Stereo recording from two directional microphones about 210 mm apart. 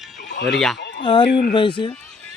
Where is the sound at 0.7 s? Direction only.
55° left (ahead or behind).